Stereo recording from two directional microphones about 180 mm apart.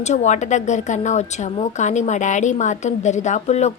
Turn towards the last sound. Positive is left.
turn(degrees=40)  # may be behind; listen again after turning